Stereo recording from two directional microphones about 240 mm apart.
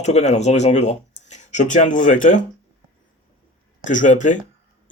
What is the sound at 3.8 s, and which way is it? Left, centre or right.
Speech, left.